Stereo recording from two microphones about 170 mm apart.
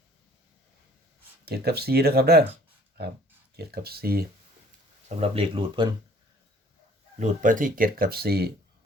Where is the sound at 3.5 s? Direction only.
70° right (ahead or behind).